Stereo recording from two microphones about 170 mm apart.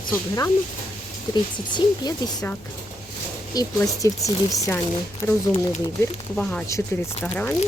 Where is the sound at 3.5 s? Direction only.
20° left (ahead or behind).